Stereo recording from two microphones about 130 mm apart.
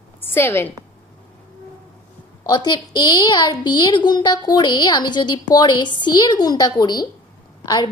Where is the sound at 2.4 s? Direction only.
30° left (ahead or behind).